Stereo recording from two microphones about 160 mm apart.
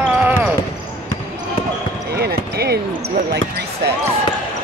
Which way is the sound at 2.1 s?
85° right.